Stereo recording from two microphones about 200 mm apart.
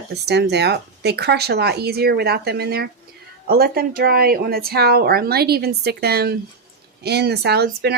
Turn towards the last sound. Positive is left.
turn(degrees=-55)  # may be behind; listen again after turning